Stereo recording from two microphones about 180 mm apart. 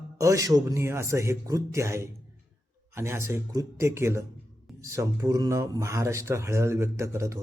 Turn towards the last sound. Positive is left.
turn(degrees=-15)  # may be behind; listen again after turning